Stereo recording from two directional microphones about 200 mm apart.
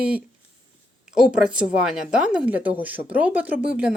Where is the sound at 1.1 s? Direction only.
5° right (ahead or behind).